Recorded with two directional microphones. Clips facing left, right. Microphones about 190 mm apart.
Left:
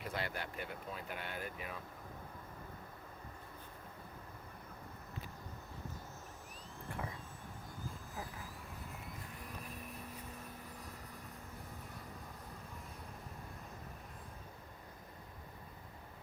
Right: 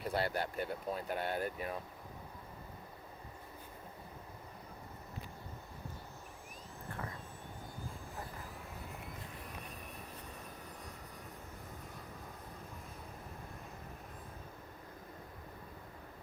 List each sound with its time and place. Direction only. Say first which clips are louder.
0.0 s speech: right 6 dB; 35° right (ahead or behind)